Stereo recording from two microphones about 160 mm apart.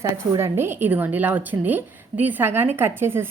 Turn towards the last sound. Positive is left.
turn(degrees=-15)  # may be behind; listen again after turning